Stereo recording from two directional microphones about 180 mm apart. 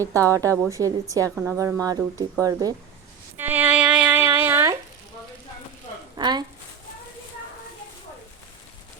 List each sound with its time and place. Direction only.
0.0 s a woman's voice: 20° right (ahead or behind)
6.1 s speech: 25° right (ahead or behind)